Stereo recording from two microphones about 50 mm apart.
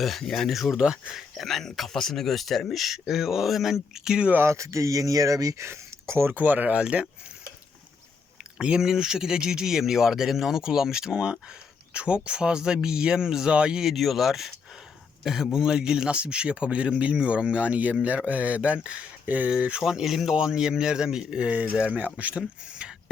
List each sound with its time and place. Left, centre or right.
0.0 s speech: centre
4.4 s speech: right
6.3 s speech: right
8.5 s speech: centre
13.8 s speech: centre; by 19.5 s right
19.5 s speech: centre
21.5 s speech: right
22.4 s speech: centre